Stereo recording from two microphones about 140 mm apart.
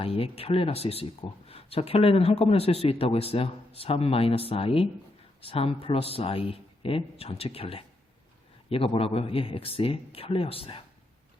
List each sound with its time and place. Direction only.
0.0 s speech: 45° left (ahead or behind)